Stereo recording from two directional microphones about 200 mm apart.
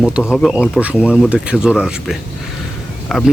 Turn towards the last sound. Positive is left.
turn(degrees=0)  # may be behind; listen again after turning